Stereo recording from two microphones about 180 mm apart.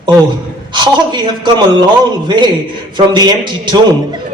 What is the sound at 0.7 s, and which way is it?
A man's voice, 25° right (ahead or behind).